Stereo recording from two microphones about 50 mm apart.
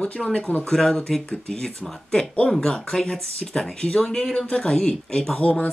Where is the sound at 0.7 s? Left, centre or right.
Centre.